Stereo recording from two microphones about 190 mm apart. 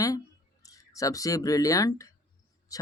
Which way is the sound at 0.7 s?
20° left (ahead or behind).